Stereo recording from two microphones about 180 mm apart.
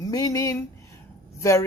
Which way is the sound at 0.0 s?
20° left (ahead or behind).